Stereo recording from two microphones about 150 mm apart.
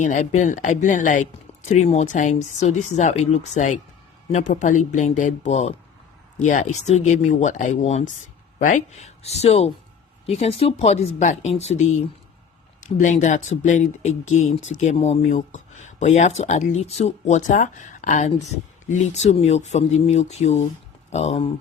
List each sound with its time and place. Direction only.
0.0 s speech: 55° left (ahead or behind)